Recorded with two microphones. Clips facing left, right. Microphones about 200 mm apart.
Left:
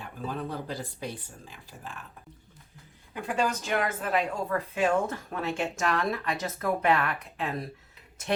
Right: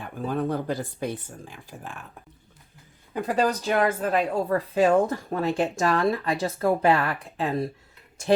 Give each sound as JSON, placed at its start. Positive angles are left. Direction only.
{"t": 0.0, "sound": "speech", "side_deg": -50}
{"t": 3.2, "sound": "speech", "side_deg": -40}